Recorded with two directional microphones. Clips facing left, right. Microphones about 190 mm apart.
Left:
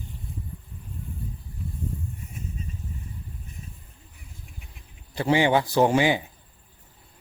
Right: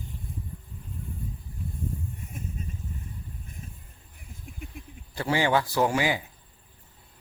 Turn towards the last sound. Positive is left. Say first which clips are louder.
# left 5 dB
turn(degrees=25)  # may be behind; listen again after turning